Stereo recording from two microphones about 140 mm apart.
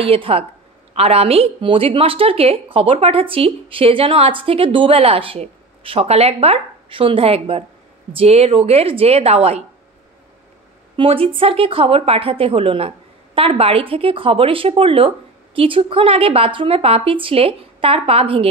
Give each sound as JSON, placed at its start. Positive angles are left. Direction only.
{"t": 0.0, "sound": "a woman's voice", "side_deg": -40}
{"t": 11.0, "sound": "a woman's voice", "side_deg": -40}